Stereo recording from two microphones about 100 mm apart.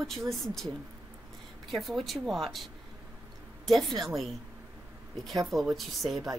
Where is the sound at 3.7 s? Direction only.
Centre (ahead or behind).